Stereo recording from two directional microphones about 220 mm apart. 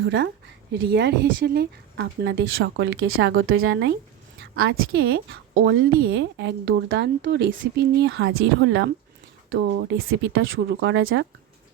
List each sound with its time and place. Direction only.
0.0 s a woman's voice: 50° right (ahead or behind)
10.1 s speech: 60° right (ahead or behind)
10.7 s speech: 50° right (ahead or behind)